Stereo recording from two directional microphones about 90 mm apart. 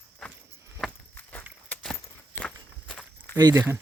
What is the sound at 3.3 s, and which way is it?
Speech, 50° right (ahead or behind).